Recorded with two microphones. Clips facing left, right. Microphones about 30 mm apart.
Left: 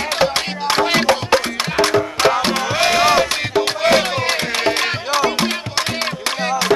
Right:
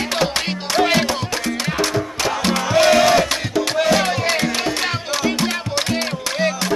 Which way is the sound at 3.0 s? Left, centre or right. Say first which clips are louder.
Even; left.